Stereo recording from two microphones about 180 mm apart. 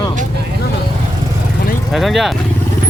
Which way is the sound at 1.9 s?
Centre (ahead or behind).